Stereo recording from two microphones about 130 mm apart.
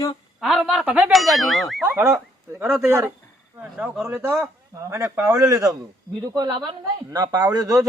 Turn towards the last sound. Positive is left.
turn(degrees=-30)  # may be behind; listen again after turning